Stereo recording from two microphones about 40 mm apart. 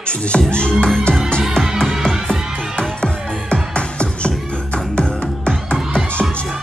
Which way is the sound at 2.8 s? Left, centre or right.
Left.